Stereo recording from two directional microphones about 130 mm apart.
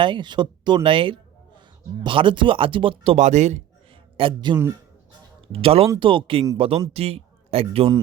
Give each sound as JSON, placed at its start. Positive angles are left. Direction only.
{"t": 0.0, "sound": "speech", "side_deg": -35}
{"t": 4.2, "sound": "speech", "side_deg": -40}